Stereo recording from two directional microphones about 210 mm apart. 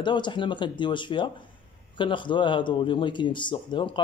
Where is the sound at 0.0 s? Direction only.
20° left (ahead or behind).